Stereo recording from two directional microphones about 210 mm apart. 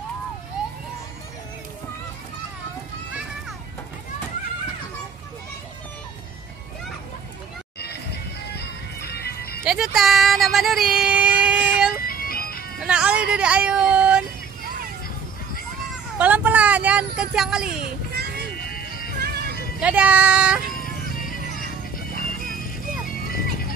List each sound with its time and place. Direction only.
8.5 s music: 50° left (ahead or behind)
9.7 s speech: centre (ahead or behind)
12.0 s music: 45° left (ahead or behind)
12.8 s a sound: 5° right (ahead or behind)
16.2 s vehicle: 5° right (ahead or behind)
18.5 s music: 45° left (ahead or behind)
19.1 s music: 50° right (ahead or behind)
19.8 s speech: 5° right (ahead or behind)
20.7 s music: 40° left (ahead or behind)